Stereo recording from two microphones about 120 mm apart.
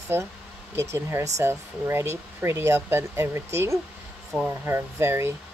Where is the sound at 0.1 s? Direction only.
20° right (ahead or behind).